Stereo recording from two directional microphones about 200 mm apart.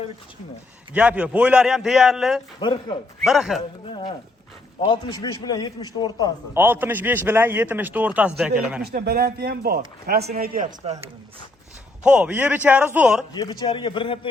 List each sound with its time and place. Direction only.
0.9 s a man's voice: 5° right (ahead or behind)
2.6 s a man's voice: 25° left (ahead or behind)
3.2 s a man's voice: centre (ahead or behind)
3.8 s a man's voice: 25° left (ahead or behind)
6.5 s a man's voice: 10° right (ahead or behind)
8.8 s a man's voice: 50° right (ahead or behind)
12.0 s a man's voice: 5° right (ahead or behind)
13.3 s a man's voice: 20° left (ahead or behind)